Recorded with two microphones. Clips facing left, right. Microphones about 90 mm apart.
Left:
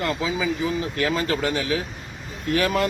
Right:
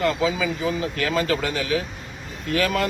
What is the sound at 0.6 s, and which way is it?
Speech, 30° right (ahead or behind).